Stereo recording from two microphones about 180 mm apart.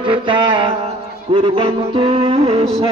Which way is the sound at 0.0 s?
25° right (ahead or behind).